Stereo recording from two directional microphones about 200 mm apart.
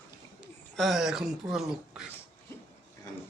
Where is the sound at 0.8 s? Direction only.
Centre (ahead or behind).